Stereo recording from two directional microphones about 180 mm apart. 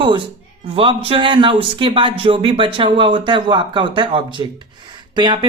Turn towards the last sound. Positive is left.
turn(degrees=-25)  # may be behind; listen again after turning